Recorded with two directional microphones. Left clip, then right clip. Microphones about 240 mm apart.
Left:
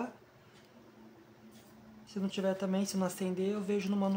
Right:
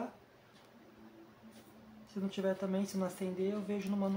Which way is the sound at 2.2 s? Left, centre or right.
Left.